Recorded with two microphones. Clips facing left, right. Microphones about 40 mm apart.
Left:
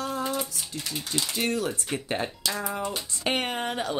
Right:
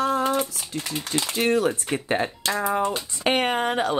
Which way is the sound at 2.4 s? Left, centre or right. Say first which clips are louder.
Right 7 dB; right.